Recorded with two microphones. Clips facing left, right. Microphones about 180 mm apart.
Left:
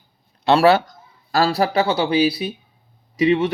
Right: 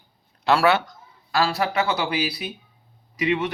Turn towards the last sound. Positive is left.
turn(degrees=30)  # may be behind; listen again after turning